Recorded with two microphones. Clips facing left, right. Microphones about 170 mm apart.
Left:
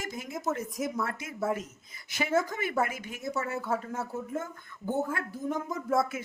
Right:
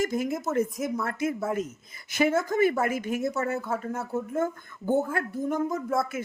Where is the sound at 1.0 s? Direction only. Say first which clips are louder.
Right 8 dB; 50° right (ahead or behind).